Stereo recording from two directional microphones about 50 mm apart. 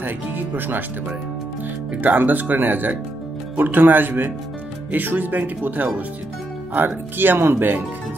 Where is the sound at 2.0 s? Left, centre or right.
Right.